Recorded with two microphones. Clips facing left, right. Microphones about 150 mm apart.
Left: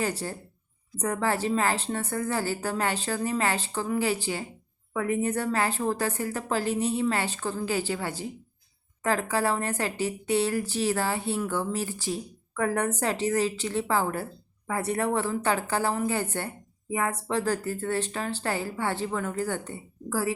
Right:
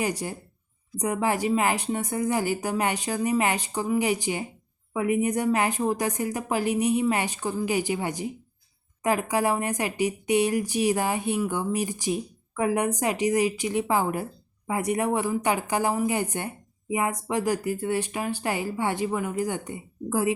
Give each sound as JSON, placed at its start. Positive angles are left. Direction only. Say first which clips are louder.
{"t": 0.0, "sound": "speech", "louder": "right 1 dB", "side_deg": -15}